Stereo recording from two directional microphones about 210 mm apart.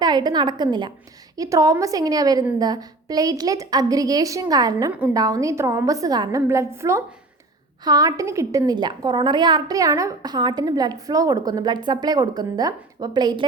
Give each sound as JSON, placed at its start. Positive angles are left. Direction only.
{"t": 0.0, "sound": "a woman's voice", "side_deg": -20}